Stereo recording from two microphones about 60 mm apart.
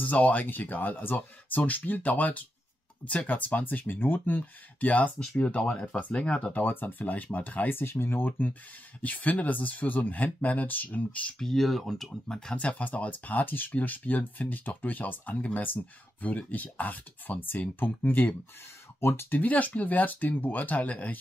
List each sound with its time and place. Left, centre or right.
0.0 s speech: left
6.5 s speech: left
11.3 s speech: centre
12.5 s speech: left
18.9 s speech: left
19.4 s speech: left